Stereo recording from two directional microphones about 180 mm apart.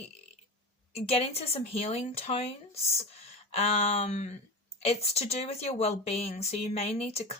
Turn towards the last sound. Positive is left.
turn(degrees=35)  # may be behind; listen again after turning